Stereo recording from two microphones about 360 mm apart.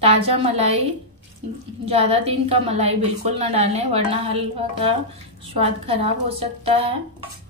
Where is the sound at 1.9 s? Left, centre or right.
Centre.